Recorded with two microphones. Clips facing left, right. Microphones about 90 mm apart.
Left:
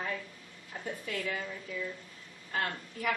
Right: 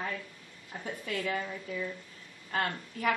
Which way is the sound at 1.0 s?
40° right (ahead or behind).